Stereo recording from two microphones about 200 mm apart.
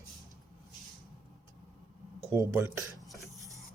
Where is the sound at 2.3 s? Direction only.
15° right (ahead or behind).